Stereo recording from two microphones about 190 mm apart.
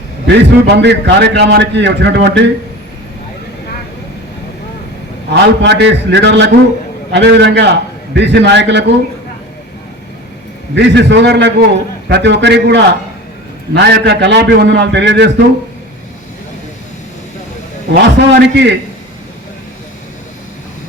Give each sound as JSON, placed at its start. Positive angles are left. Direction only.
{"t": 0.3, "sound": "a man's voice", "side_deg": -65}
{"t": 5.3, "sound": "a man's voice", "side_deg": -65}
{"t": 10.8, "sound": "a man's voice", "side_deg": -65}
{"t": 17.9, "sound": "a man's voice", "side_deg": -65}